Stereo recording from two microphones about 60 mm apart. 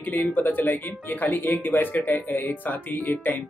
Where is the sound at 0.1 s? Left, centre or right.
Left.